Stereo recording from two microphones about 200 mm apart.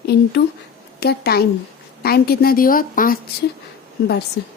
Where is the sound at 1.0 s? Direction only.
50° left (ahead or behind).